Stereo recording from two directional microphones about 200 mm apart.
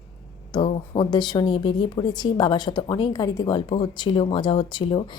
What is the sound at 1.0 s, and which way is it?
A woman's voice, 20° left (ahead or behind).